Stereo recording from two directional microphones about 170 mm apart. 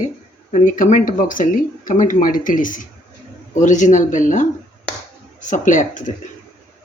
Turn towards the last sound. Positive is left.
turn(degrees=50)  # may be behind; listen again after turning